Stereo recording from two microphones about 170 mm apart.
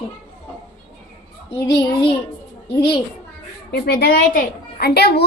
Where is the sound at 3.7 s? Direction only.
70° left (ahead or behind).